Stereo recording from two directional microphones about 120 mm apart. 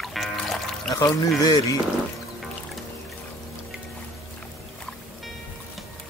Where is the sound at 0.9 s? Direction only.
35° left (ahead or behind).